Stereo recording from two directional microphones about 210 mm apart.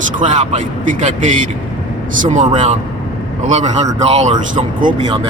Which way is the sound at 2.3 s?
35° right (ahead or behind).